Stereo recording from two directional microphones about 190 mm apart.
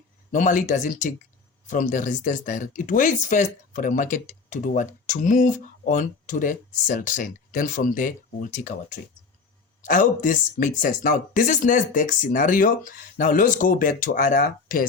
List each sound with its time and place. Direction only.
0.3 s speech: 45° left (ahead or behind)
9.8 s speech: 45° left (ahead or behind)